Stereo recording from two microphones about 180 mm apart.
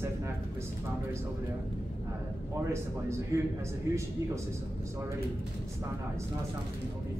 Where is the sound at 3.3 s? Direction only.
15° right (ahead or behind).